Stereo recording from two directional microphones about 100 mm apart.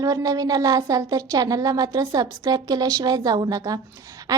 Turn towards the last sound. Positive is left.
turn(degrees=-40)  # may be behind; listen again after turning